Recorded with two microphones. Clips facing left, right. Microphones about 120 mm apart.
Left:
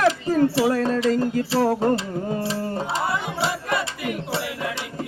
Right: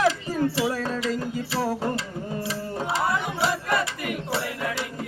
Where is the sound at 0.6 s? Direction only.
50° left (ahead or behind).